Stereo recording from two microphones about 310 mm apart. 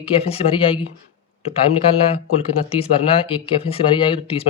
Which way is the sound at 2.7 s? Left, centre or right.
Centre.